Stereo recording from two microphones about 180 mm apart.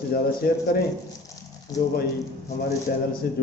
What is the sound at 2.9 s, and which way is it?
Speech, 55° left (ahead or behind).